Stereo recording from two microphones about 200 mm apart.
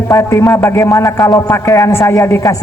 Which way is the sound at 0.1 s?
15° left (ahead or behind).